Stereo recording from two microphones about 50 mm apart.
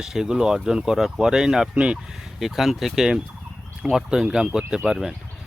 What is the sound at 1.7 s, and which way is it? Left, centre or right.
Speech, right.